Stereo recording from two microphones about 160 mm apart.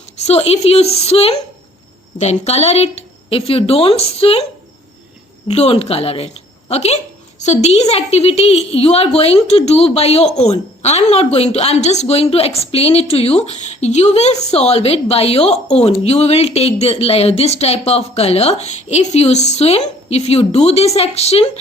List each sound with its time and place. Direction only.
0.2 s a woman's voice: 40° left (ahead or behind)
5.5 s a woman's voice: 40° left (ahead or behind)